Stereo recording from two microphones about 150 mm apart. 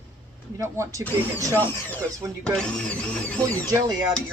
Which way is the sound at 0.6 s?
20° right (ahead or behind).